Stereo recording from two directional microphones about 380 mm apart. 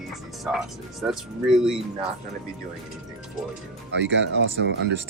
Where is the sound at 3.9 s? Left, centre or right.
Right.